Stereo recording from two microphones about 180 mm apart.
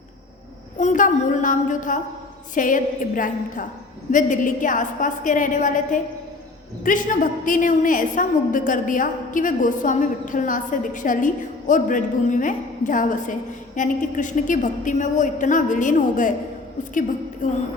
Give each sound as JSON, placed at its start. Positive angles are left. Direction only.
{"t": 0.8, "sound": "a woman's voice", "side_deg": 45}
{"t": 17.4, "sound": "a woman's voice", "side_deg": 45}